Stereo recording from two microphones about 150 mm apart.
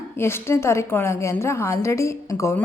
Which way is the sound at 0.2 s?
15° left (ahead or behind).